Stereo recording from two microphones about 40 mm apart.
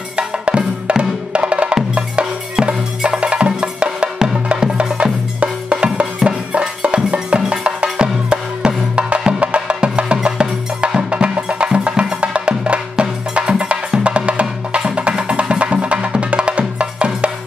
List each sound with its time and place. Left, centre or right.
0.5 s music: right
1.5 s wood block: right
2.6 s music: right
5.4 s music: right